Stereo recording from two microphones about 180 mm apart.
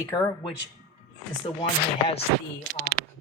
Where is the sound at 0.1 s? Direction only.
20° left (ahead or behind).